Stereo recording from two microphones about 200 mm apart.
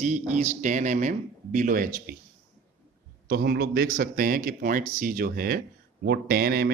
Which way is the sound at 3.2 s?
50° right (ahead or behind).